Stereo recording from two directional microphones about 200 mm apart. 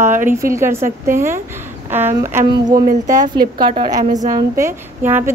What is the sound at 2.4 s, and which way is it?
Speech, 20° right (ahead or behind).